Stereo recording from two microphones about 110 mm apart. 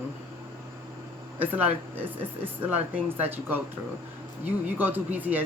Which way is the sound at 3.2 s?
15° right (ahead or behind).